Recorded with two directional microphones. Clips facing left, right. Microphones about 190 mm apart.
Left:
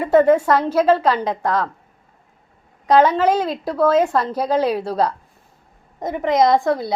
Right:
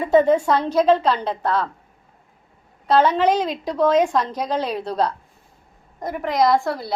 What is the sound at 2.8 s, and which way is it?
A woman's voice, 10° left (ahead or behind).